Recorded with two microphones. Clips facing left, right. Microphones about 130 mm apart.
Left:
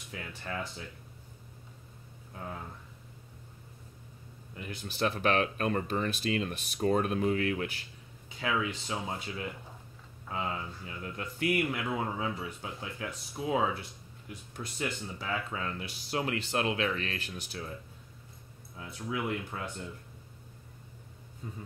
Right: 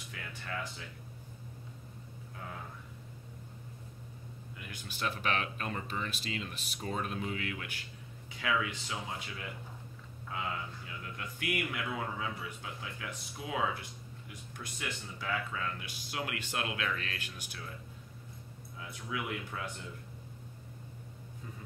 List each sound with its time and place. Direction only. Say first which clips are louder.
0.1 s speech: left 3 dB; 30° left (ahead or behind)
4.6 s speech: left 6 dB; 35° left (ahead or behind)
8.4 s speech: left 2 dB; 30° left (ahead or behind)
18.8 s speech: left 4 dB; 30° left (ahead or behind)